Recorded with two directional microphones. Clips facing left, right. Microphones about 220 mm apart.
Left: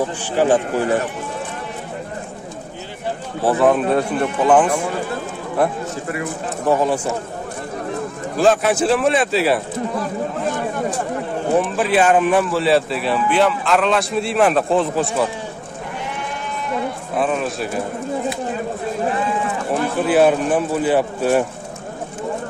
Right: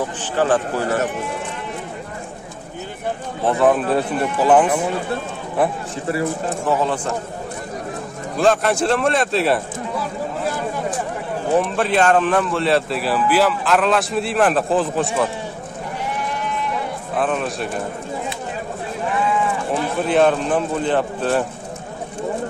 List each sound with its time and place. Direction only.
0.4 s speech: 15° left (ahead or behind)
3.4 s speech: centre (ahead or behind)
6.7 s speech: 10° left (ahead or behind)
8.4 s speech: centre (ahead or behind)
11.5 s speech: centre (ahead or behind)
17.1 s speech: centre (ahead or behind)
19.0 s a sound: 40° left (ahead or behind)
20.1 s speech: 5° left (ahead or behind)